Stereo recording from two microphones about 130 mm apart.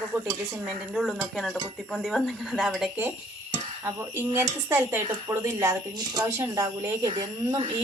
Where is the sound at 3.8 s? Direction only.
20° right (ahead or behind).